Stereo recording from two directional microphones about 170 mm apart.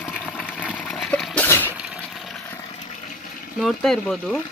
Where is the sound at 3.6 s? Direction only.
Centre (ahead or behind).